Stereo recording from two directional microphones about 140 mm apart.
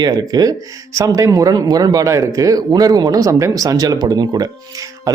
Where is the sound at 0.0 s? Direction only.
30° right (ahead or behind).